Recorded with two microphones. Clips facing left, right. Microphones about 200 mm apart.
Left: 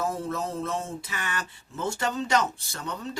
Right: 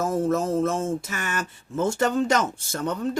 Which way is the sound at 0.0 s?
45° right (ahead or behind).